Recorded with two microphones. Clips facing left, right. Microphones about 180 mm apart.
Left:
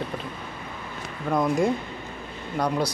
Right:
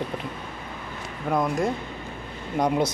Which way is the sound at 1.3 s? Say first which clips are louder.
Left 2 dB; centre (ahead or behind).